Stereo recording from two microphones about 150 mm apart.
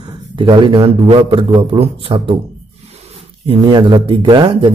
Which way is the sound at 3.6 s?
30° right (ahead or behind).